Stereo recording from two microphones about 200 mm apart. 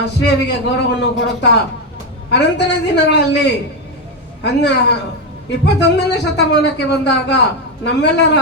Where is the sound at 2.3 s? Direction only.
60° left (ahead or behind).